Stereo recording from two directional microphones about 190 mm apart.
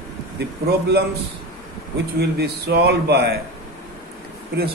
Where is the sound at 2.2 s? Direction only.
60° right (ahead or behind).